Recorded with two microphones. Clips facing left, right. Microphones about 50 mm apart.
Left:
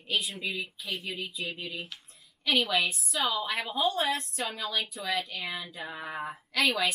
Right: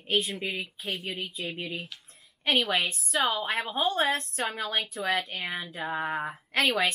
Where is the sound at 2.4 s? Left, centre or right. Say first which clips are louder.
Right 1 dB; right.